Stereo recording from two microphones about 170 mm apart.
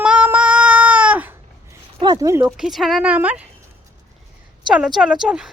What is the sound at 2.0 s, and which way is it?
Speech, 20° right (ahead or behind).